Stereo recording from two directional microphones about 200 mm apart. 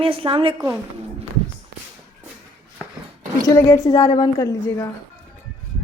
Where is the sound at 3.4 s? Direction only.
20° left (ahead or behind).